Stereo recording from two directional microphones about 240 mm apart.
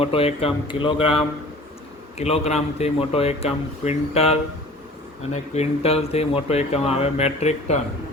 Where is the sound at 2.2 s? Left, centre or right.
Left.